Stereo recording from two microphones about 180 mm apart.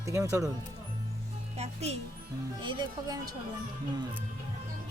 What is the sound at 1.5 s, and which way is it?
Speech, 35° right (ahead or behind).